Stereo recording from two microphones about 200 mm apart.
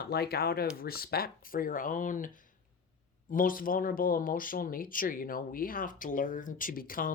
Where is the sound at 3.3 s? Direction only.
45° left (ahead or behind).